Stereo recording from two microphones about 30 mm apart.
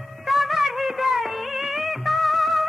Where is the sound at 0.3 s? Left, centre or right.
Centre.